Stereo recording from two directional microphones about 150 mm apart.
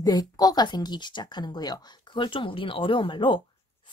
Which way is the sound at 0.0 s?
25° left (ahead or behind).